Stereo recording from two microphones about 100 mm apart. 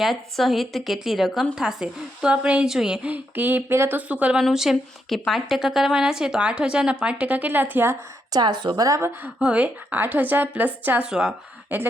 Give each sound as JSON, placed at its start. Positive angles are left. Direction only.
{"t": 0.0, "sound": "a woman's voice", "side_deg": 0}
{"t": 8.3, "sound": "a woman's voice", "side_deg": -45}
{"t": 9.0, "sound": "a woman's voice", "side_deg": -25}
{"t": 9.4, "sound": "a woman's voice", "side_deg": -15}
{"t": 11.7, "sound": "a woman's voice", "side_deg": -20}